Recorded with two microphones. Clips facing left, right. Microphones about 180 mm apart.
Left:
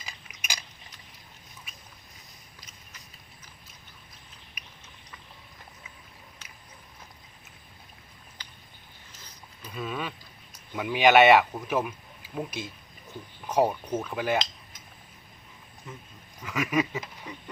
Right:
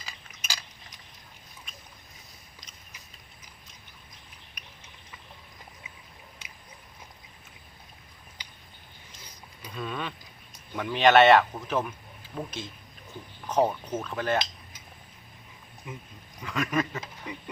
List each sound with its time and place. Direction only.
0.0 s a sound: 15° left (ahead or behind)
1.7 s boat: 5° left (ahead or behind)
9.6 s a sound: 5° left (ahead or behind)
10.8 s speech: 10° left (ahead or behind)
15.9 s speech: 15° right (ahead or behind)
16.4 s speech: 5° left (ahead or behind)
17.3 s speech: 15° right (ahead or behind)